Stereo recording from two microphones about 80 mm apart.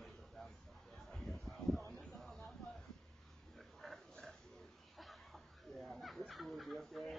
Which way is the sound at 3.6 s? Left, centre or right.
Centre.